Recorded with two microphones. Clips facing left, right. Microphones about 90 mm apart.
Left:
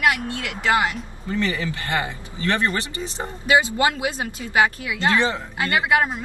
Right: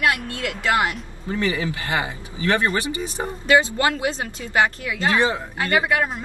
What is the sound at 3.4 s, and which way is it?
Speech, 20° left (ahead or behind).